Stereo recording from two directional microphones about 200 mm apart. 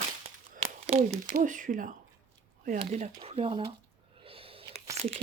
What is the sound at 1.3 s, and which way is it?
Speech, 40° right (ahead or behind).